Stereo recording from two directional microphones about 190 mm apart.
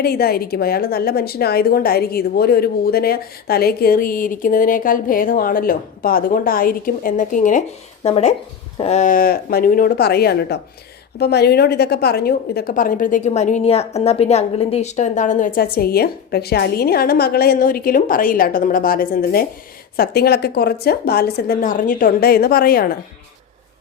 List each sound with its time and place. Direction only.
0.0 s a woman's voice: 55° left (ahead or behind)